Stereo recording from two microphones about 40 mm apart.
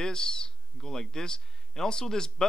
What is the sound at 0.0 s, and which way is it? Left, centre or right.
Speech, centre.